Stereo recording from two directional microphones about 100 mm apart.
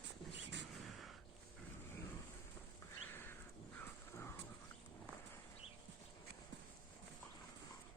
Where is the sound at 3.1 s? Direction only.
20° left (ahead or behind).